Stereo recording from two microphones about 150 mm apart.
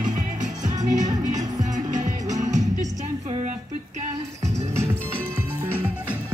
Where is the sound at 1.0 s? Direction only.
25° right (ahead or behind).